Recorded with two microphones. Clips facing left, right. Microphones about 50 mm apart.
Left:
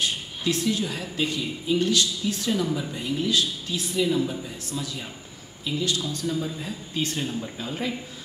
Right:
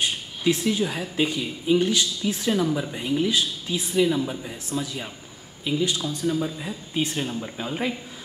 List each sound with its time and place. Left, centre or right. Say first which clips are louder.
0.0 s speech: right 3 dB; centre